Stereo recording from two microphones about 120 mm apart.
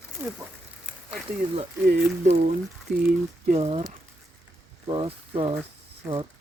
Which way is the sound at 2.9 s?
10° right (ahead or behind).